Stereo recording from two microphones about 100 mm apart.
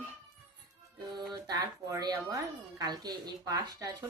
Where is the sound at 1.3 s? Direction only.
40° right (ahead or behind).